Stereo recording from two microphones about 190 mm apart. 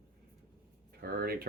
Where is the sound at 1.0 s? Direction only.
55° right (ahead or behind).